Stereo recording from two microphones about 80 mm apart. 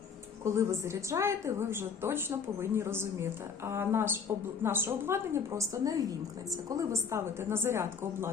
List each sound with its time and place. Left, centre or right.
0.4 s a woman's voice: right